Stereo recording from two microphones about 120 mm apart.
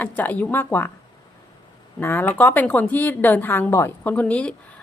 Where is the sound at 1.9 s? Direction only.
15° left (ahead or behind).